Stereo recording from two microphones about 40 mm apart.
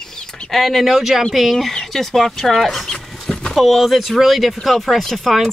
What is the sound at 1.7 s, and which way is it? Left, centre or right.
Speech, centre.